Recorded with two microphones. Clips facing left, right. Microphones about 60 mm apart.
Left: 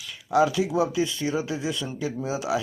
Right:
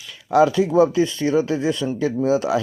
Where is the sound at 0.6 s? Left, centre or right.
Right.